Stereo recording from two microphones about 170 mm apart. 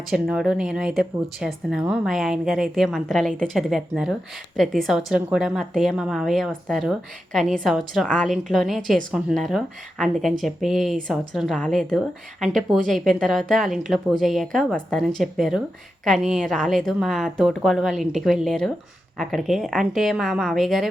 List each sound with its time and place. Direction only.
0.1 s speech: 5° right (ahead or behind)